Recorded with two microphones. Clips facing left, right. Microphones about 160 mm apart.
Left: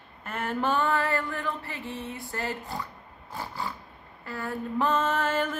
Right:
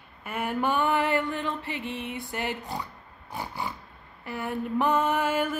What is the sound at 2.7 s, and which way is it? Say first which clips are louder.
Pig: right 1 dB; 15° right (ahead or behind).